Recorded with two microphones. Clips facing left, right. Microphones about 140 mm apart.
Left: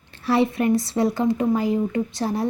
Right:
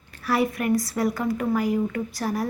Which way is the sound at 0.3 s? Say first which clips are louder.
Left 3 dB; 25° left (ahead or behind).